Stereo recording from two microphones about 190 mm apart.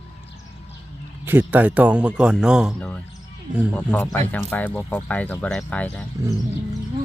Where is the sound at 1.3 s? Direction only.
10° right (ahead or behind).